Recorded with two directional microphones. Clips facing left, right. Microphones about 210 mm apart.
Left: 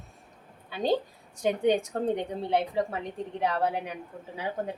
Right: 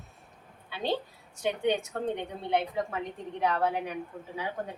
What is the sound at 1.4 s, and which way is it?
A woman's voice, 35° left (ahead or behind).